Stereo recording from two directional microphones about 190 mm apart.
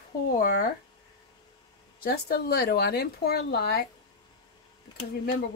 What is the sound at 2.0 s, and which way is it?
Speech, 55° left (ahead or behind).